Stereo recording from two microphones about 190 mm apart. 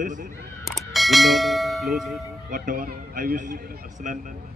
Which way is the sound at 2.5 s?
45° right (ahead or behind).